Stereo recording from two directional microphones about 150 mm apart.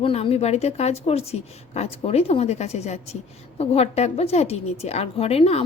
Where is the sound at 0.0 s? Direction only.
40° left (ahead or behind).